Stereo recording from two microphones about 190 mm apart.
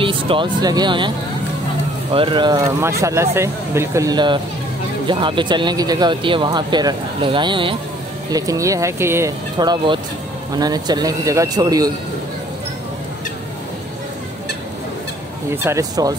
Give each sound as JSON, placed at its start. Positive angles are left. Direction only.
{"t": 0.0, "sound": "speech", "side_deg": -25}
{"t": 2.1, "sound": "speech", "side_deg": -25}
{"t": 15.5, "sound": "speech", "side_deg": -15}